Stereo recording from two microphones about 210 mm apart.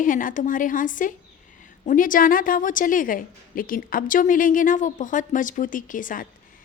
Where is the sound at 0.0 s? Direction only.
40° left (ahead or behind).